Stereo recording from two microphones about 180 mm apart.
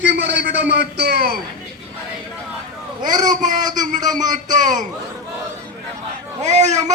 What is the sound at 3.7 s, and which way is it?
A man's voice, 45° right (ahead or behind).